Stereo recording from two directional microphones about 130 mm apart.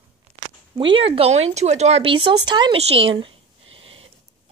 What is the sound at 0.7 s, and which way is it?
Speech, 40° right (ahead or behind).